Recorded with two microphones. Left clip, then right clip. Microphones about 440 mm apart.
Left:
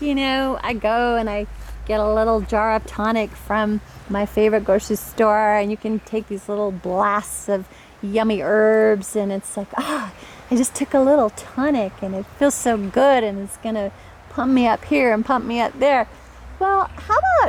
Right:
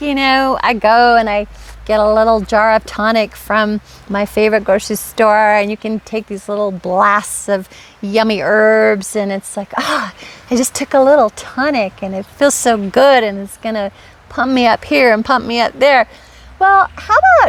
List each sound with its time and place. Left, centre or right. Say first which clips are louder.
0.0 s speech: right 8 dB; right